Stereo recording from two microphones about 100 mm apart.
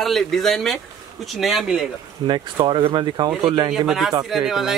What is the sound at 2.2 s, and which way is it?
Speech, 45° right (ahead or behind).